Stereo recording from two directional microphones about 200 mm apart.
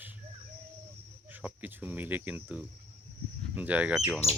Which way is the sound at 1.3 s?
10° right (ahead or behind).